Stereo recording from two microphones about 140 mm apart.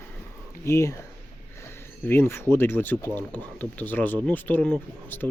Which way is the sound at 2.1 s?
15° left (ahead or behind).